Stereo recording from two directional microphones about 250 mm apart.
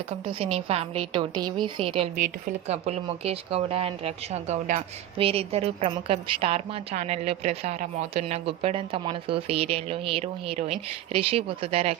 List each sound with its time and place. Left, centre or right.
0.1 s speech: right